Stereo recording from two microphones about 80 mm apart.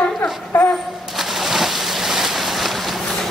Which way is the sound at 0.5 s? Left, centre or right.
Left.